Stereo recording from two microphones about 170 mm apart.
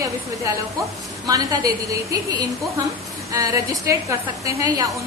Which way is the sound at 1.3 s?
20° right (ahead or behind).